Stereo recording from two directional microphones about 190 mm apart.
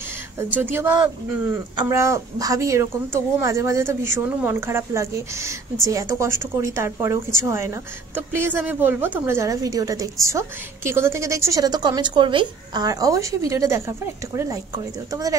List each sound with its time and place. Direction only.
0.6 s a woman's voice: 10° right (ahead or behind)